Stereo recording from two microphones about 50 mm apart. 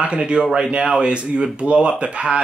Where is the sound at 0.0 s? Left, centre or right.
Centre.